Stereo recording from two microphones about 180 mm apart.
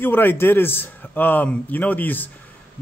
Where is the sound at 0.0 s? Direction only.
10° left (ahead or behind).